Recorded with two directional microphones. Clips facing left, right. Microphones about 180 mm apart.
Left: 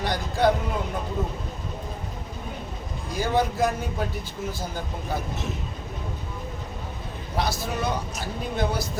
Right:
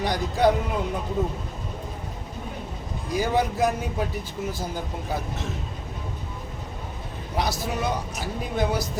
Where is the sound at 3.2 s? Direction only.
15° right (ahead or behind).